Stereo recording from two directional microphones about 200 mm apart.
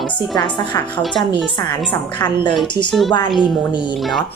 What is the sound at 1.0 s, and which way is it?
Speech, centre (ahead or behind).